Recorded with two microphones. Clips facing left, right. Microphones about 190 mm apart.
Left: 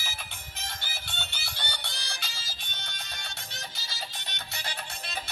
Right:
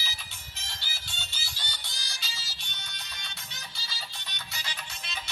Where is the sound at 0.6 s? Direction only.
50° left (ahead or behind).